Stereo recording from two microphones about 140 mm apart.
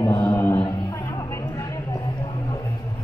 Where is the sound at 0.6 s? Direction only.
25° left (ahead or behind).